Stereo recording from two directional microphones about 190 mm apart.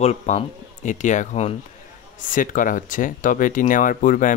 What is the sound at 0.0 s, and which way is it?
Speech, 35° left (ahead or behind).